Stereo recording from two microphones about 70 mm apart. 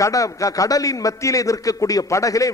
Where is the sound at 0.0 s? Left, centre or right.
Left.